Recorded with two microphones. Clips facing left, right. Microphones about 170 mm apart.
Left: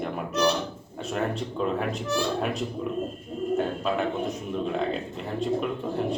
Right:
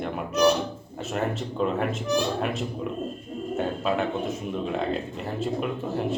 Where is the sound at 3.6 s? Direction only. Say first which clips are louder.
Right 4 dB; centre (ahead or behind).